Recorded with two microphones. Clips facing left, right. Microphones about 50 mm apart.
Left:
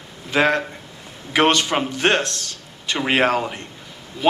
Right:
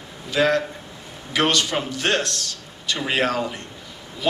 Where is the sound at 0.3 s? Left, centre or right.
Left.